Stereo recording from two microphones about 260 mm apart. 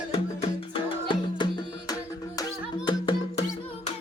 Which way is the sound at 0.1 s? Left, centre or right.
Left.